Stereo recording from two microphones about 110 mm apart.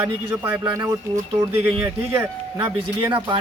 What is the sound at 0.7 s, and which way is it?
Speech, 30° right (ahead or behind).